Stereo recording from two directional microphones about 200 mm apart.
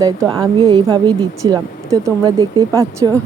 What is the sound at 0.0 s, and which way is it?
Speech, 20° right (ahead or behind).